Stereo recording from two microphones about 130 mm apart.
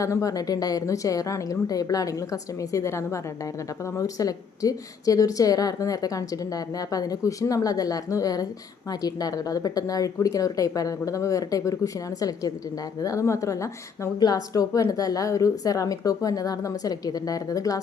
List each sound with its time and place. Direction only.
0.0 s a woman's voice: 25° left (ahead or behind)